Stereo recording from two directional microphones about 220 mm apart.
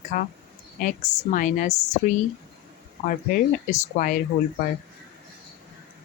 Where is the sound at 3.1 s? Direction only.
35° left (ahead or behind).